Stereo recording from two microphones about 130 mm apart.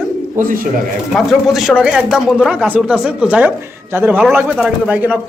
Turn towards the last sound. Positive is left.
turn(degrees=-10)  # may be behind; listen again after turning